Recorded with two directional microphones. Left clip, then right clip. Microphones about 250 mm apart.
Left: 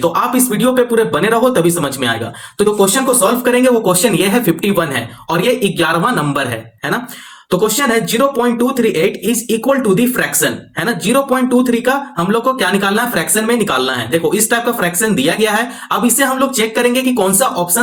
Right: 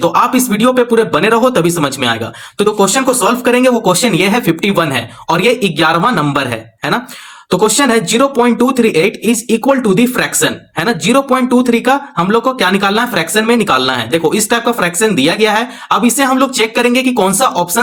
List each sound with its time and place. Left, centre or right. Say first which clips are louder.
0.1 s speech: right 3 dB; right